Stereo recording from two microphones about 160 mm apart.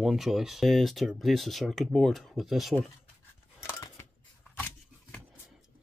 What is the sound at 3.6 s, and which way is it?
Scissors, 15° left (ahead or behind).